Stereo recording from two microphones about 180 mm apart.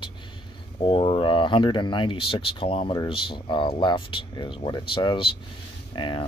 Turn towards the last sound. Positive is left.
turn(degrees=25)  # may be behind; listen again after turning